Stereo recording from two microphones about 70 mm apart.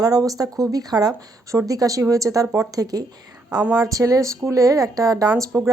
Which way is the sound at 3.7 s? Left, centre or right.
Right.